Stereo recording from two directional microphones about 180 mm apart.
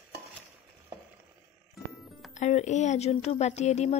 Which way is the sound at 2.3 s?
40° left (ahead or behind).